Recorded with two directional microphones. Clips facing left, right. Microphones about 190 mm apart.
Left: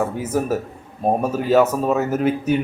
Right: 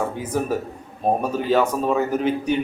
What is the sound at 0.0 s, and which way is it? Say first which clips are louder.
Speech: left 3 dB; 5° left (ahead or behind).